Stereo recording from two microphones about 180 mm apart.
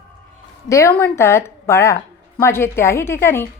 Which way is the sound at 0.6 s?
15° left (ahead or behind).